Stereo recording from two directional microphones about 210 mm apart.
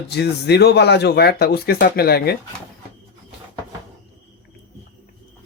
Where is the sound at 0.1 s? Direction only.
50° left (ahead or behind).